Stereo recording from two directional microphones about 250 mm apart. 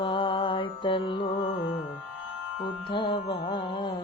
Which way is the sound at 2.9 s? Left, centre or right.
Left.